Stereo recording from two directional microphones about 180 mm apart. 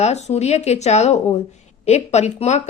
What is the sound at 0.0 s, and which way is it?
Speech, 40° left (ahead or behind).